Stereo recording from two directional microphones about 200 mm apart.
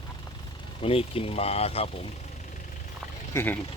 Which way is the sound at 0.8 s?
30° left (ahead or behind).